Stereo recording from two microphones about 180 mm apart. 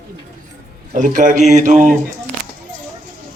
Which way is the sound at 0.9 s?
45° right (ahead or behind).